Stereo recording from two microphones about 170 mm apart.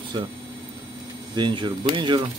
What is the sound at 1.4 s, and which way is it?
Speech, 25° right (ahead or behind).